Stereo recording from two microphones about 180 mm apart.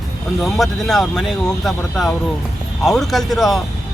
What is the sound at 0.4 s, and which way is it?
Speech, centre (ahead or behind).